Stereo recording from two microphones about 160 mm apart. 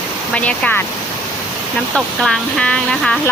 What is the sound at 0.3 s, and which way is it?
Speech, 10° left (ahead or behind).